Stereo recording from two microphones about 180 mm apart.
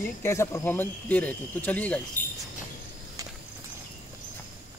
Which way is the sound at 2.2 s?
45° left (ahead or behind).